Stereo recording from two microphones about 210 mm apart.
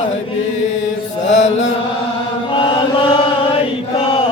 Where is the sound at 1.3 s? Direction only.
35° left (ahead or behind).